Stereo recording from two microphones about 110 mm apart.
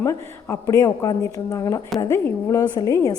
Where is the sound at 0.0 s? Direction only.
25° left (ahead or behind).